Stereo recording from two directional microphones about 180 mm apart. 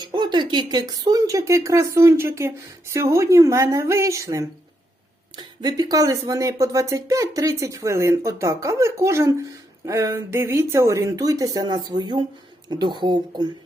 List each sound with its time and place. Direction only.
0.0 s speech: 25° right (ahead or behind)